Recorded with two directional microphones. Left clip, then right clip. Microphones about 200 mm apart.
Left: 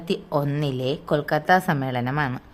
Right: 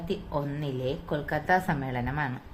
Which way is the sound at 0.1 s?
55° left (ahead or behind).